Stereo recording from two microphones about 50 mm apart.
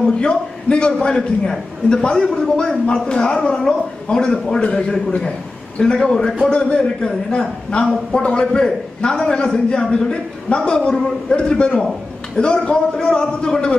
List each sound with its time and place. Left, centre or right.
0.2 s a man's voice: centre
5.9 s a man's voice: centre